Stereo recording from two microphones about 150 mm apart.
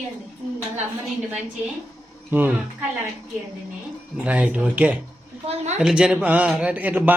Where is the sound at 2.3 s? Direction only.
15° right (ahead or behind).